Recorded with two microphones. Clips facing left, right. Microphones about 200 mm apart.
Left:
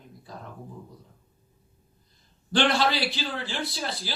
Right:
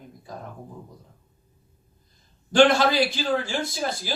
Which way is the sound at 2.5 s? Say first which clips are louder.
Right 6 dB; 45° right (ahead or behind).